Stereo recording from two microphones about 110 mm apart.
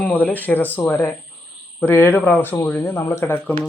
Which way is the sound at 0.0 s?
15° left (ahead or behind).